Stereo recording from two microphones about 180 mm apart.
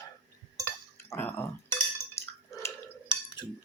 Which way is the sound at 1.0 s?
15° left (ahead or behind).